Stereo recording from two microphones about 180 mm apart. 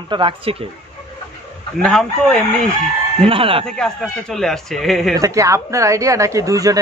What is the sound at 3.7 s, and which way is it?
Speech, 5° left (ahead or behind).